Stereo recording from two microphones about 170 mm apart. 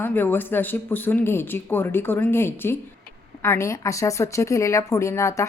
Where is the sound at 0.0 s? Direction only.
10° left (ahead or behind).